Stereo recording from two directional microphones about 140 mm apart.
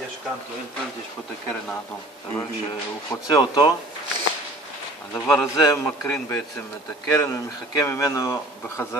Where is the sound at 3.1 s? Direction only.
30° left (ahead or behind).